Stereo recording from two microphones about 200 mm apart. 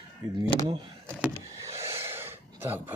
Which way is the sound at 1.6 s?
15° right (ahead or behind).